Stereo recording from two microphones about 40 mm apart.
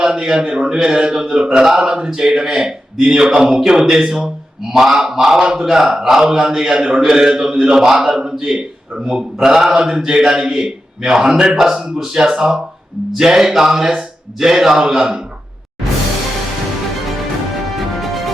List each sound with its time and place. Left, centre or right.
0.0 s a man's voice: centre